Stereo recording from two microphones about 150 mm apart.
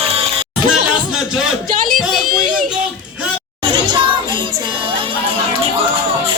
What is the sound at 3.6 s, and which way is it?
Child singing, 30° right (ahead or behind).